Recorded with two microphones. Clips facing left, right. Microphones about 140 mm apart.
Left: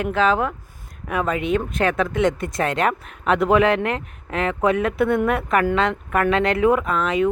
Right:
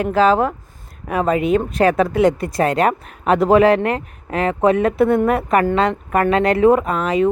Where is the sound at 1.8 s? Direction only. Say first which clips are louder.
Right 7 dB; 40° right (ahead or behind).